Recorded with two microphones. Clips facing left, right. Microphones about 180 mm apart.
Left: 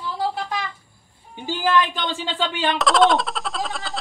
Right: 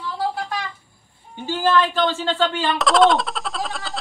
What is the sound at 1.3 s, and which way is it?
Speech, 15° left (ahead or behind).